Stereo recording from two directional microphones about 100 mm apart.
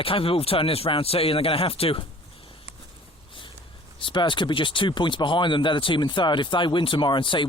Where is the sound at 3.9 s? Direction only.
55° left (ahead or behind).